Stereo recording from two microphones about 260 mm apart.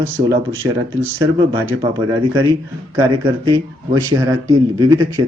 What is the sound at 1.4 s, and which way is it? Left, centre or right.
Speech, centre.